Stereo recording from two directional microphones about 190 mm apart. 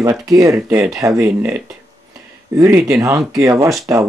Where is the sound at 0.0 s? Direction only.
15° right (ahead or behind).